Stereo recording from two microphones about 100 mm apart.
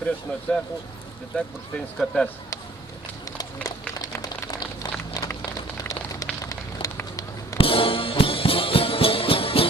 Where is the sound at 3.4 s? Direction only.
40° left (ahead or behind).